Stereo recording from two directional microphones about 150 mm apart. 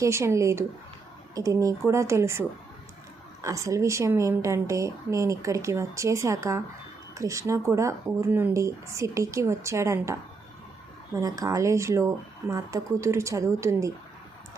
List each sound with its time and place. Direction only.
0.0 s a woman's voice: 20° right (ahead or behind)
3.4 s a woman's voice: 20° right (ahead or behind)